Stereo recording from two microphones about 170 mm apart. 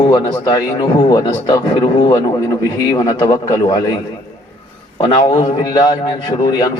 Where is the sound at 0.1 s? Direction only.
25° left (ahead or behind).